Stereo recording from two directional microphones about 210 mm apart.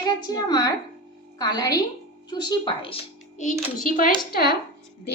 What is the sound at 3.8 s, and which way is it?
Speech, 40° left (ahead or behind).